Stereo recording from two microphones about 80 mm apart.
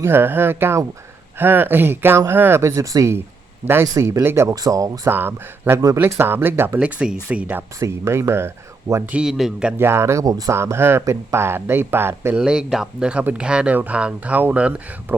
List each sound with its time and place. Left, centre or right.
0.0 s speech: right
3.7 s speech: right
4.5 s speech: right
5.0 s speech: right
6.7 s speech: centre
7.8 s speech: right
9.1 s speech: centre
9.7 s speech: right
10.5 s speech: right
12.4 s speech: centre